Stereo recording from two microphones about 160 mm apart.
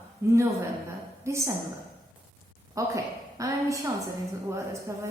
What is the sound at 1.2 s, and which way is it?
Speech, 15° right (ahead or behind).